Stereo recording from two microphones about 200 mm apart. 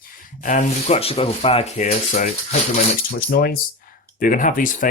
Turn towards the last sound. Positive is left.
turn(degrees=40)  # may be behind; listen again after turning